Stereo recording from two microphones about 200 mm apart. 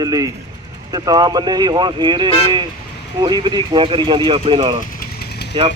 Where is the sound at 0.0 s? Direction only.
20° right (ahead or behind).